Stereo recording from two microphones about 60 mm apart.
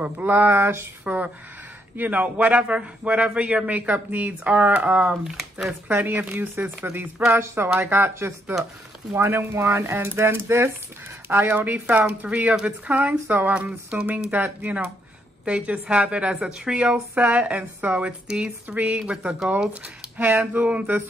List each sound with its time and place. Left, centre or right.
0.0 s speech: right
1.0 s speech: right
11.2 s speech: right
13.6 s speech: centre